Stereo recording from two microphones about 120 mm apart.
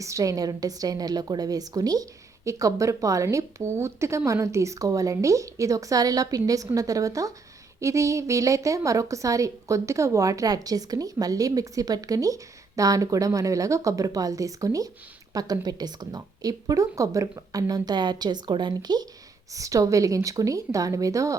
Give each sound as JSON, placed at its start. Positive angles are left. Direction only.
{"t": 0.0, "sound": "a woman's voice", "side_deg": -25}